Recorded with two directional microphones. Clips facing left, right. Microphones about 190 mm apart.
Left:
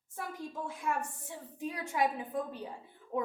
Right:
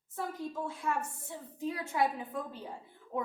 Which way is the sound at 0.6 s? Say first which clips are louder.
Left 1 dB; 15° left (ahead or behind).